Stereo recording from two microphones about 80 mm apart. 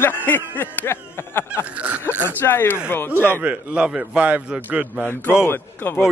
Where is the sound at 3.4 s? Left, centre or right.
Centre.